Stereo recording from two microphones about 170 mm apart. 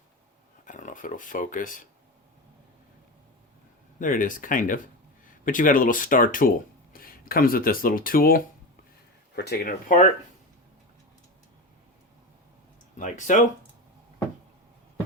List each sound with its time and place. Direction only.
0.6 s speech: 50° left (ahead or behind)
4.0 s speech: 50° left (ahead or behind)
9.3 s speech: 70° left (ahead or behind); by 10.1 s 55° left (ahead or behind)
13.0 s speech: 45° left (ahead or behind)